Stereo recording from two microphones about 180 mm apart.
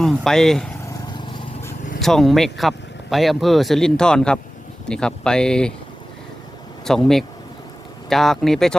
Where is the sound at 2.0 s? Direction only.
Centre (ahead or behind).